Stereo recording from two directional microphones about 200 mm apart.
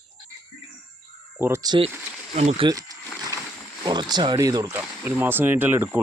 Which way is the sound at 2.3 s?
30° right (ahead or behind).